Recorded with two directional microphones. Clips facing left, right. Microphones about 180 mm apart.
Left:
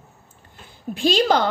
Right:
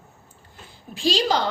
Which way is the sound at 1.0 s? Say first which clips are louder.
Left 4 dB; 55° left (ahead or behind).